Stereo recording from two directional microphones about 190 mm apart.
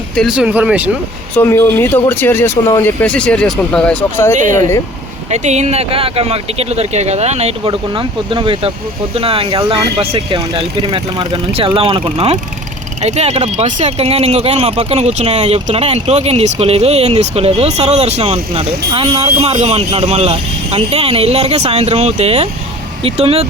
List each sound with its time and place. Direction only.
0.2 s speech: 5° right (ahead or behind)
1.4 s speech: 15° left (ahead or behind)
4.4 s speech: 40° right (ahead or behind)